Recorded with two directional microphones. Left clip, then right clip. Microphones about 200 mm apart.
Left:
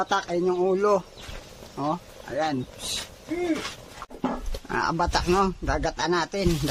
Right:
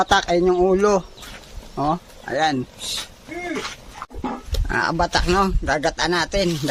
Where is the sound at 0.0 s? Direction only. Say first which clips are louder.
Right 8 dB; 25° right (ahead or behind).